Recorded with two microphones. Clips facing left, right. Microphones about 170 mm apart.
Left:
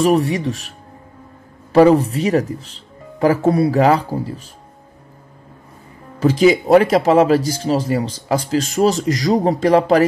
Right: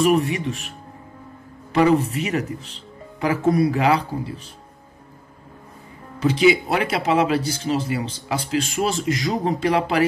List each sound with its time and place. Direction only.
0.0 s speech: 35° left (ahead or behind)
6.1 s speech: 40° left (ahead or behind)